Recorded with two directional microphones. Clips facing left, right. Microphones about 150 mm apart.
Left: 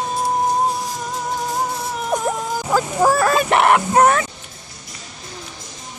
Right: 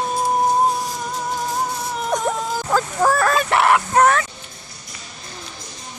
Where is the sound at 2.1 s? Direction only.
10° left (ahead or behind).